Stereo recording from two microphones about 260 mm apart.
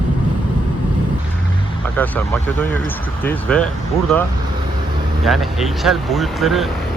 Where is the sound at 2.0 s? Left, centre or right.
Centre.